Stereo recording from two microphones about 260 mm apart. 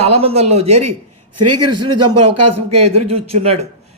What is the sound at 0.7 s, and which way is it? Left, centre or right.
A man's voice, right.